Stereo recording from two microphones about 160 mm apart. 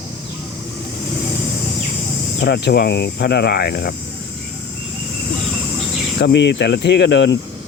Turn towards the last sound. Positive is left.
turn(degrees=90)